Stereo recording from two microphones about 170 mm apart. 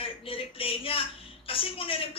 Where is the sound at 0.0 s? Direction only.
35° left (ahead or behind).